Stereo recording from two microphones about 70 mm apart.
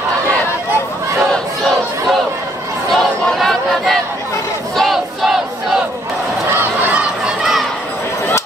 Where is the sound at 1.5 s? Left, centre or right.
Centre.